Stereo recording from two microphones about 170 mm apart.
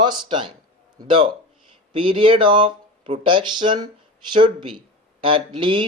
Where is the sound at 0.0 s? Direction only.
25° right (ahead or behind).